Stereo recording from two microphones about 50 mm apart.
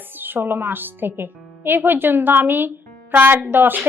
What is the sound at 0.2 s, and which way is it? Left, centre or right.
A woman's voice, right.